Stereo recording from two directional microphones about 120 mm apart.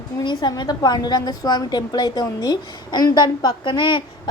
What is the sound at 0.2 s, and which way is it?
A woman's voice, 35° left (ahead or behind).